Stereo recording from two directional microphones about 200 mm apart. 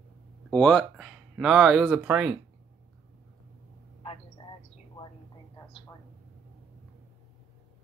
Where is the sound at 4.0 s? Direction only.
25° left (ahead or behind).